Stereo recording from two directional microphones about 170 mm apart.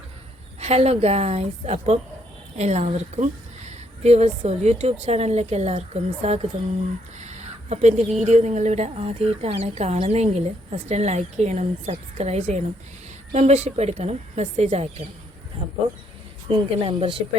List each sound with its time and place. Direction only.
0.6 s a woman's voice: 40° right (ahead or behind)
7.2 s a sound: 40° right (ahead or behind)
8.2 s a woman's voice: 40° right (ahead or behind)
16.5 s a woman's voice: 35° right (ahead or behind)